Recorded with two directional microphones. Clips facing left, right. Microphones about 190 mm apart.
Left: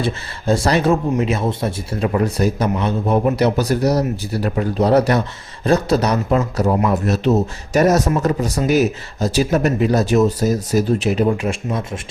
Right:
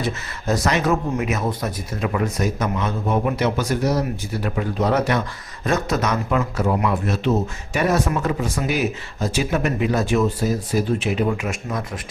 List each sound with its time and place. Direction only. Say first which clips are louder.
0.0 s speech: left 4 dB; 30° left (ahead or behind)